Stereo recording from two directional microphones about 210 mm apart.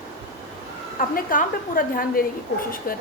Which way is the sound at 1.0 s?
40° left (ahead or behind).